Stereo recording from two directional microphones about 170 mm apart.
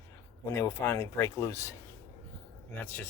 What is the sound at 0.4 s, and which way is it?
Speech, 15° left (ahead or behind).